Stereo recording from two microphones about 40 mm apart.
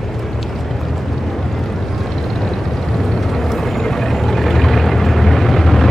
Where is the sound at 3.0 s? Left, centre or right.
Centre.